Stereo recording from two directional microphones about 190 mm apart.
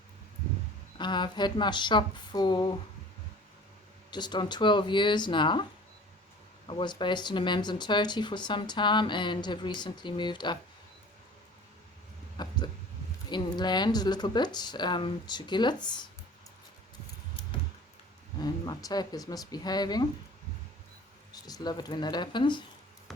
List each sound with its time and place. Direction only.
0.9 s speech: 25° left (ahead or behind)
4.1 s speech: 25° left (ahead or behind)
6.7 s speech: 25° left (ahead or behind)
12.4 s a sound: 20° left (ahead or behind)
13.3 s speech: 25° left (ahead or behind)
18.4 s speech: 20° left (ahead or behind)
21.3 s speech: 20° left (ahead or behind)